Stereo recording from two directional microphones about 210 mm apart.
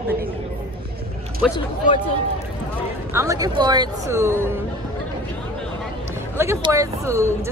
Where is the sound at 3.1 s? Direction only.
15° right (ahead or behind).